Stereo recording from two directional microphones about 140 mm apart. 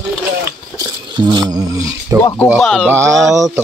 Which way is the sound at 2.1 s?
20° right (ahead or behind).